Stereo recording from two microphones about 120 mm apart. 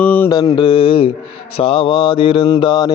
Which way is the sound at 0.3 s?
30° left (ahead or behind).